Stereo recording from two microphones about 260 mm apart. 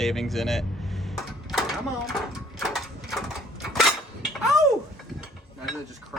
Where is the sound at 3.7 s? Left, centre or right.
Centre.